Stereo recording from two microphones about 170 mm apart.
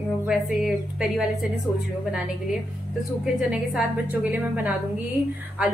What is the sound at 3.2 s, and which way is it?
Speech, 5° right (ahead or behind).